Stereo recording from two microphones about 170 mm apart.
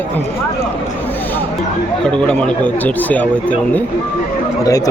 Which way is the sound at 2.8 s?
10° left (ahead or behind).